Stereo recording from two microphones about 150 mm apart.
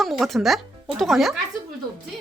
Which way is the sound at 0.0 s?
Centre (ahead or behind).